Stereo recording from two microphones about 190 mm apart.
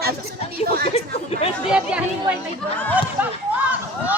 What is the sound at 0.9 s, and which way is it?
Chatter, 35° left (ahead or behind).